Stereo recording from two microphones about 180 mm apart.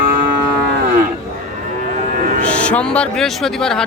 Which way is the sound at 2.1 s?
50° right (ahead or behind).